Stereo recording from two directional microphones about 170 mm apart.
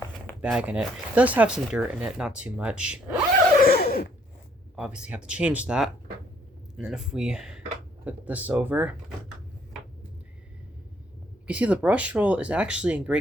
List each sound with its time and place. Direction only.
0.4 s speech: 5° right (ahead or behind)
3.6 s a sound: 65° left (ahead or behind)
4.8 s speech: 5° right (ahead or behind)
11.4 s speech: 5° right (ahead or behind)